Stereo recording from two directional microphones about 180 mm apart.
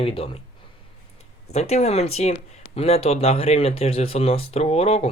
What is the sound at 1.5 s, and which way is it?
A man's voice, 35° left (ahead or behind).